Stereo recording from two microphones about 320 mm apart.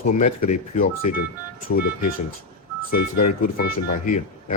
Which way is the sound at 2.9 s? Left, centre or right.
Left.